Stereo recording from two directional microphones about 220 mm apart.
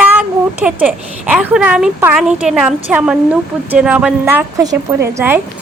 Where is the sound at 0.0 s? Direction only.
5° right (ahead or behind).